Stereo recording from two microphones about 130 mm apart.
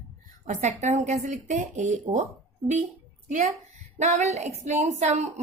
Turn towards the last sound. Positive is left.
turn(degrees=-60)  # may be behind; listen again after turning